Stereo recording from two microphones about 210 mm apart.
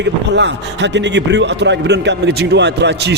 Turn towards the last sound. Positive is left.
turn(degrees=-55)  # may be behind; listen again after turning